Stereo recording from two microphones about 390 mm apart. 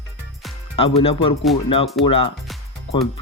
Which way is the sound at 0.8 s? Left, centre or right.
Centre.